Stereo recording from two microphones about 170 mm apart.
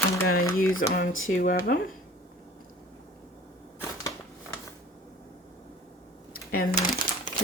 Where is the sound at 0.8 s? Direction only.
65° left (ahead or behind).